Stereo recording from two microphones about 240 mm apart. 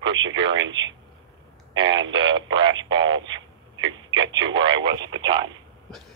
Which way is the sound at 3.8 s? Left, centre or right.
Centre.